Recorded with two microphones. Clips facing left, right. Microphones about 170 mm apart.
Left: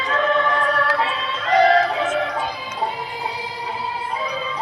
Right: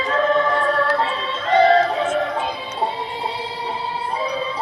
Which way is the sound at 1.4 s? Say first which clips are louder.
Right 1 dB; 30° right (ahead or behind).